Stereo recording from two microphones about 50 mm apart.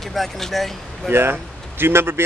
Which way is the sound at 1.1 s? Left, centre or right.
Right.